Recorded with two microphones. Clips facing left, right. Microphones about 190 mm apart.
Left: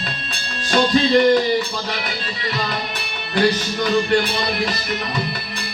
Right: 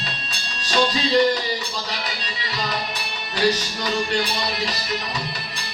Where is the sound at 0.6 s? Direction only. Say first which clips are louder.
Left 5 dB; 55° left (ahead or behind).